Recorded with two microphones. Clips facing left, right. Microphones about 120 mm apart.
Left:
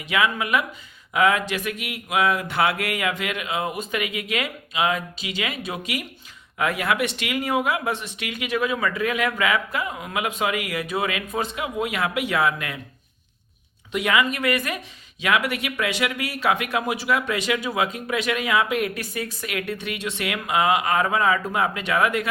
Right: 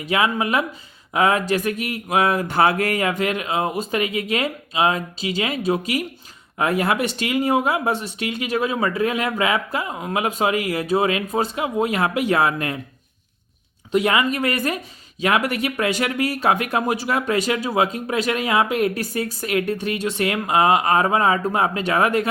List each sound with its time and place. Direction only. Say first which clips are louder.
0.0 s speech: right 3 dB; 35° right (ahead or behind)
13.9 s speech: right 3 dB; 35° right (ahead or behind)